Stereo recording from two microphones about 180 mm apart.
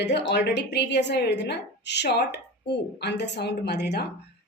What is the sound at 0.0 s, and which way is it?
A woman's voice, 70° left (ahead or behind).